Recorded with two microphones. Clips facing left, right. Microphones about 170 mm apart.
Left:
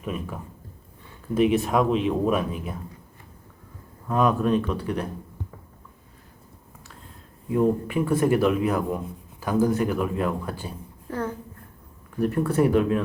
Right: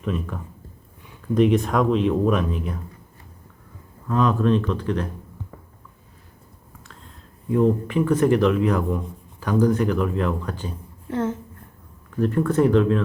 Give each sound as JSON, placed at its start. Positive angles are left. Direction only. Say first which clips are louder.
{"t": 0.0, "sound": "speech", "louder": "right 4 dB", "side_deg": 10}
{"t": 4.1, "sound": "speech", "louder": "right 2 dB", "side_deg": 10}
{"t": 7.6, "sound": "speech", "louder": "right 2 dB", "side_deg": 10}
{"t": 11.1, "sound": "a woman's voice", "louder": "right 5 dB", "side_deg": -20}
{"t": 12.2, "sound": "speech", "louder": "right 2 dB", "side_deg": 10}